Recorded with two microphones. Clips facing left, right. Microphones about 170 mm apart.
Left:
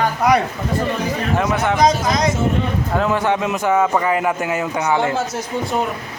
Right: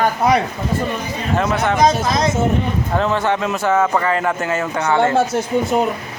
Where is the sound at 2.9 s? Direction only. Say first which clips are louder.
Even; 10° left (ahead or behind).